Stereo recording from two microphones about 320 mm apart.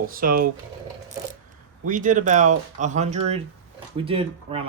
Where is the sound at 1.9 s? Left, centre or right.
Right.